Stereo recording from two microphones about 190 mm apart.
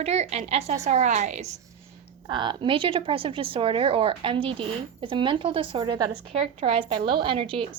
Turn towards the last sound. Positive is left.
turn(degrees=-30)  # may be behind; listen again after turning